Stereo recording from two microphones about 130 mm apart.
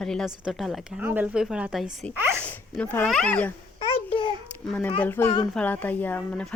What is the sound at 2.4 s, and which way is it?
A woman's voice, 10° left (ahead or behind).